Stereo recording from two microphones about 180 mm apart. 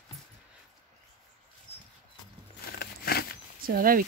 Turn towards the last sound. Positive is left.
turn(degrees=-55)  # may be behind; listen again after turning